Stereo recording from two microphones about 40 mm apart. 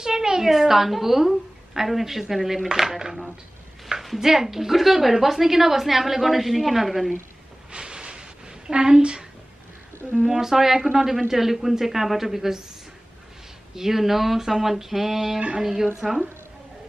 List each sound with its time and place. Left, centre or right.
0.0 s a woman's voice: centre
7.7 s a sound: right
10.2 s a woman's voice: centre
13.7 s a woman's voice: centre